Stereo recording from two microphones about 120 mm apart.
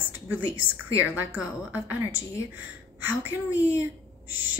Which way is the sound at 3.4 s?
25° left (ahead or behind).